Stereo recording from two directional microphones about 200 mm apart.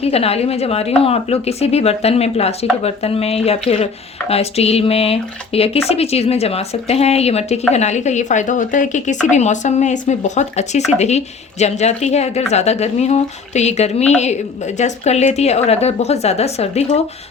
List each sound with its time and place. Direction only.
0.0 s speech: 30° left (ahead or behind)